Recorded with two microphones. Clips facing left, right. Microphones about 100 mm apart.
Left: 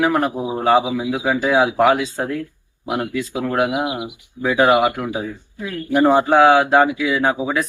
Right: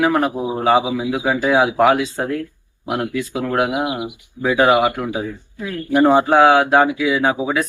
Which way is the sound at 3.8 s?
20° left (ahead or behind).